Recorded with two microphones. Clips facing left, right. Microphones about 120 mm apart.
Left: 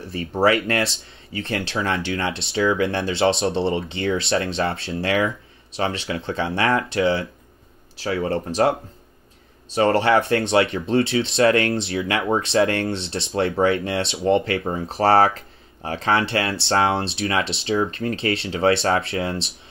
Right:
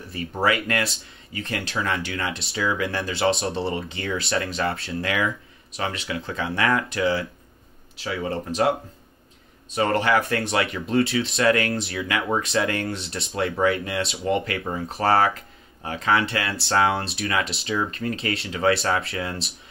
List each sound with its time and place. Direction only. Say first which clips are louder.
0.1 s speech: left 5 dB; 30° left (ahead or behind)
8.0 s speech: left 4 dB; 35° left (ahead or behind)